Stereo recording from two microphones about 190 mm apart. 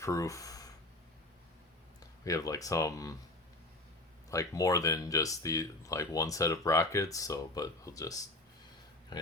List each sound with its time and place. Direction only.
0.0 s speech: 15° left (ahead or behind)
2.0 s speech: 15° left (ahead or behind)
4.3 s speech: 15° left (ahead or behind)